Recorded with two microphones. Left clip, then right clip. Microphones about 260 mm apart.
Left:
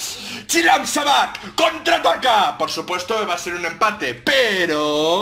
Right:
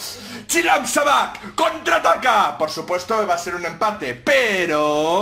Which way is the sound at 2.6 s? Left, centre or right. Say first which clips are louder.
Even; left.